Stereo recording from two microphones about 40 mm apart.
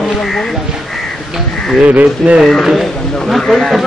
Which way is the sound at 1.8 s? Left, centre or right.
Right.